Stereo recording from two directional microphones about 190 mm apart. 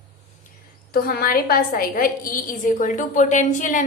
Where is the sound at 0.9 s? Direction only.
50° left (ahead or behind).